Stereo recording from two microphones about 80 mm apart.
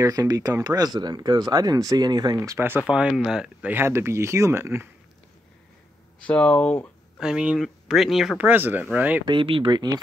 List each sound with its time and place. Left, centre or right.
0.0 s speech: right
2.6 s speech: centre
3.7 s speech: right
6.2 s speech: centre
7.2 s speech: centre
8.4 s speech: right
9.2 s speech: right